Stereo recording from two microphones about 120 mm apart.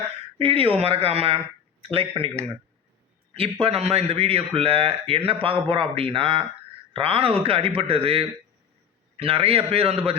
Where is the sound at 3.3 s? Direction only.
50° right (ahead or behind).